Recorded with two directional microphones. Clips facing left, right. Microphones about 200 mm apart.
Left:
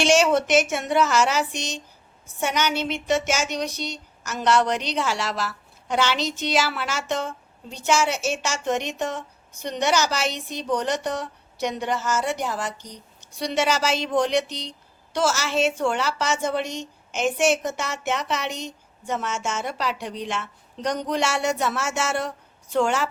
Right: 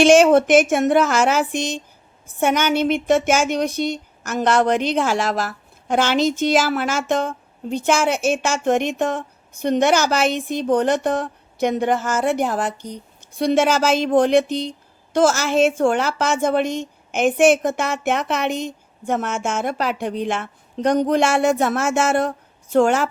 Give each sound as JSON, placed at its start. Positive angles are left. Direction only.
{"t": 0.0, "sound": "speech", "side_deg": -50}